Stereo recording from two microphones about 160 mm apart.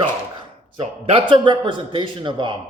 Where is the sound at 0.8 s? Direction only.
35° right (ahead or behind).